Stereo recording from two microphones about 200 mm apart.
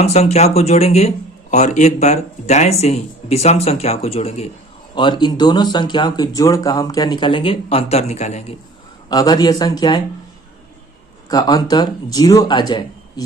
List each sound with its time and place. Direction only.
0.0 s speech: 30° left (ahead or behind)
9.0 s speech: 20° left (ahead or behind)
11.3 s speech: 20° left (ahead or behind)